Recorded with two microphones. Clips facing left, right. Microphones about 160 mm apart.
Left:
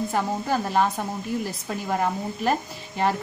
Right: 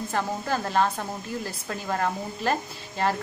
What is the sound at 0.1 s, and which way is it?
Speech, 15° left (ahead or behind).